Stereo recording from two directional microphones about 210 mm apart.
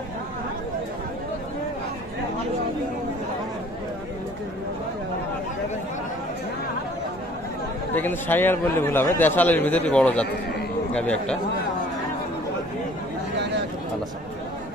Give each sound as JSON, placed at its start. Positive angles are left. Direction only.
{"t": 7.9, "sound": "a man's voice", "side_deg": 10}